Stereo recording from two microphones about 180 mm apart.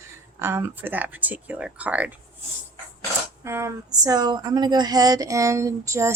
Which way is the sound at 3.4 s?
15° right (ahead or behind).